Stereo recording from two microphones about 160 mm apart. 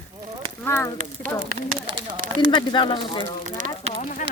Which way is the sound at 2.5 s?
30° left (ahead or behind).